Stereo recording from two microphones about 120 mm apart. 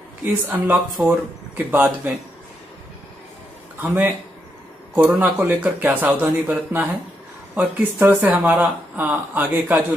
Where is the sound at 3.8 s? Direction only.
15° right (ahead or behind).